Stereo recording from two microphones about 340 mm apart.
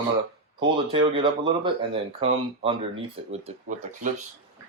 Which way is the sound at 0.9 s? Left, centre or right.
Centre.